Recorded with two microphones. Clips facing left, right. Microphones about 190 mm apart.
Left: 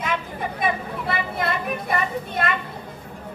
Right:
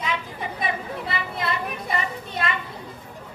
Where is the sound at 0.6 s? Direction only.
50° left (ahead or behind).